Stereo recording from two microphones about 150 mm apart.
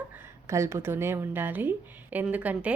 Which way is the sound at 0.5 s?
20° right (ahead or behind).